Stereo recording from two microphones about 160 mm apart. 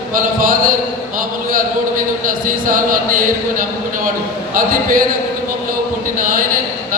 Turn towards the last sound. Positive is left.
turn(degrees=-55)  # may be behind; listen again after turning